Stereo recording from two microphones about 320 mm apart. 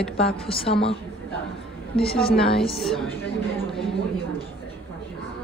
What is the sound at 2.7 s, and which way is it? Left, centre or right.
Speech, centre.